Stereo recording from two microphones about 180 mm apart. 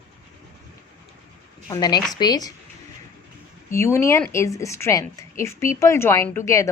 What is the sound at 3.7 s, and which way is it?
A woman's voice, 15° left (ahead or behind).